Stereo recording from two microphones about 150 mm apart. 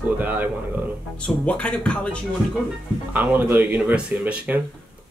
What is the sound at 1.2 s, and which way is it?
Speech, 10° left (ahead or behind).